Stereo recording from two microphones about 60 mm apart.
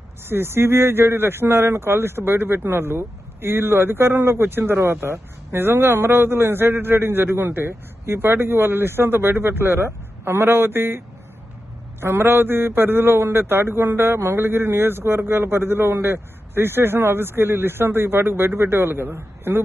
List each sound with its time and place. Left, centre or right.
0.3 s a man's voice: right
12.0 s a man's voice: right